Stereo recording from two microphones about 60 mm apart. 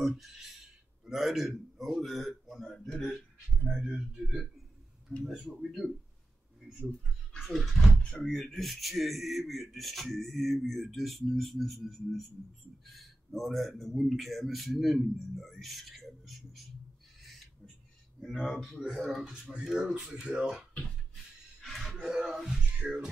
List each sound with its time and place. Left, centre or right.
0.0 s a man's voice: centre
3.6 s speech: centre
7.3 s a man's voice: centre
18.2 s a man's voice: centre
20.7 s music: centre
22.8 s speech: centre